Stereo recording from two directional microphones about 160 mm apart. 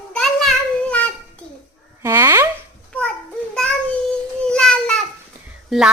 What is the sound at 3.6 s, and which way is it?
Child singing, 10° left (ahead or behind).